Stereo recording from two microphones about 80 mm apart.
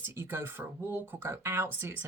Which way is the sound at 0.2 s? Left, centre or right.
Right.